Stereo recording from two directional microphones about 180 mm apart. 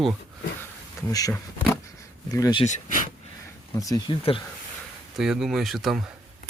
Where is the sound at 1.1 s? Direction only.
20° left (ahead or behind).